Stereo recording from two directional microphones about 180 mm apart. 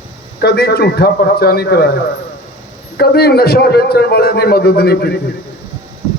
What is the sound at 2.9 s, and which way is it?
A man's voice, 60° left (ahead or behind).